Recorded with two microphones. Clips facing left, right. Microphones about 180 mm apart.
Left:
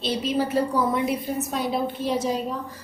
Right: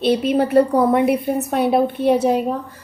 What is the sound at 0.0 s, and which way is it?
A woman's voice, 60° right (ahead or behind).